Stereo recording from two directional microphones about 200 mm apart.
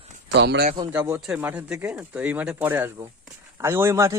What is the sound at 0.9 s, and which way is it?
Speech, 15° right (ahead or behind).